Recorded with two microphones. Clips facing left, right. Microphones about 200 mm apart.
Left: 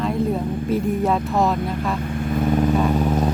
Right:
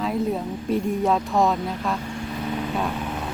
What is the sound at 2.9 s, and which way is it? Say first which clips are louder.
Vehicle: left 10 dB; 40° left (ahead or behind).